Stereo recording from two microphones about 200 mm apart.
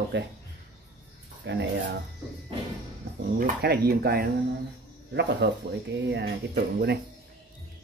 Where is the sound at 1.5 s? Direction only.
60° right (ahead or behind).